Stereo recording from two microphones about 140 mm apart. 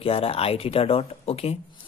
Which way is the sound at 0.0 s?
45° left (ahead or behind).